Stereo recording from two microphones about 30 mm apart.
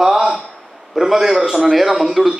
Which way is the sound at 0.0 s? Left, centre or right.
Centre.